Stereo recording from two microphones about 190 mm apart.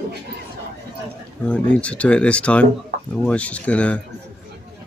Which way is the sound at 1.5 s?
5° left (ahead or behind).